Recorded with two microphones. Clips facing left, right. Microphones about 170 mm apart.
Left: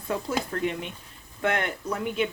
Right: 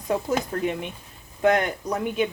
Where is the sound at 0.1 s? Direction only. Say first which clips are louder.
Right 4 dB; 20° right (ahead or behind).